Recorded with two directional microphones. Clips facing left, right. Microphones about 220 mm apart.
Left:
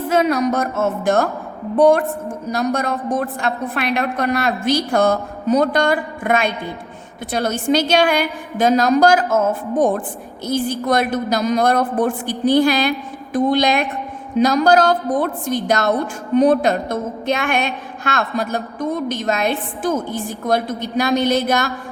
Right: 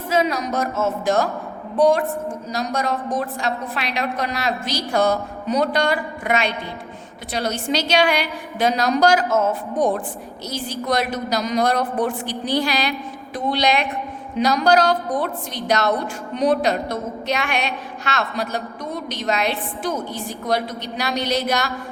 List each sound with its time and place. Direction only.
0.1 s a woman's voice: 55° left (ahead or behind)